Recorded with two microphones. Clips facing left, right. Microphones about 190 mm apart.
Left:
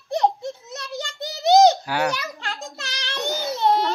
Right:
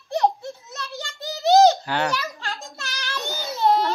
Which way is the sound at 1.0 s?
20° left (ahead or behind).